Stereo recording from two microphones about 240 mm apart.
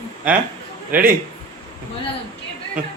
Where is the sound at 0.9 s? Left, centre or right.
Right.